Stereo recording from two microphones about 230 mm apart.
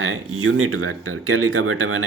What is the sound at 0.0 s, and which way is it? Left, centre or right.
Speech, right.